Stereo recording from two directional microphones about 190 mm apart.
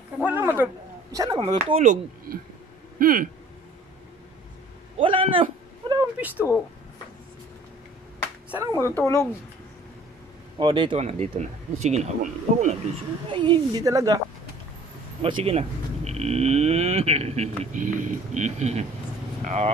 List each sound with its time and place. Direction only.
0.2 s a sound: 10° right (ahead or behind)
1.1 s speech: 15° right (ahead or behind)
1.4 s a woman's voice: 30° right (ahead or behind)
3.0 s speech: 45° right (ahead or behind)
4.9 s a sound: 25° right (ahead or behind)
5.9 s a sound: 10° right (ahead or behind)
8.5 s speech: 10° right (ahead or behind)
8.9 s speech: 15° left (ahead or behind)
10.6 s speech: 25° right (ahead or behind)
13.3 s a woman's voice: 25° right (ahead or behind)
15.2 s speech: 30° right (ahead or behind)